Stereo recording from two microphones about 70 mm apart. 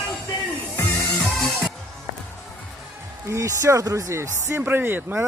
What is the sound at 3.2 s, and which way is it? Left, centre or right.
Speech, right.